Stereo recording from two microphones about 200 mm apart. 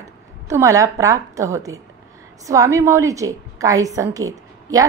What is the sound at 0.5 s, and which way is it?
A woman's voice, 15° right (ahead or behind).